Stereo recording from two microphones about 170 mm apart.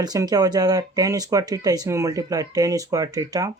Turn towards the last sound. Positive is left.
turn(degrees=-20)  # may be behind; listen again after turning